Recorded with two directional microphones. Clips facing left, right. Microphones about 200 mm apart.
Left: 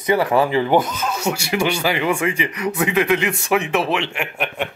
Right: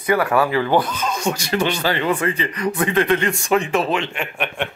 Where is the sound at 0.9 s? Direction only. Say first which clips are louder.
Even; 10° left (ahead or behind).